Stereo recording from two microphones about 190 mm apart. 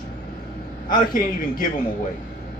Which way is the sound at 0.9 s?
45° left (ahead or behind).